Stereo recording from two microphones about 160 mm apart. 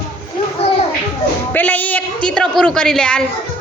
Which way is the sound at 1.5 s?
10° left (ahead or behind).